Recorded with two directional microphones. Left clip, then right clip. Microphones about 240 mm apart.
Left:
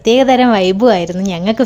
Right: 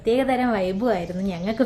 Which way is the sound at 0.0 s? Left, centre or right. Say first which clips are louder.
Left 11 dB; left.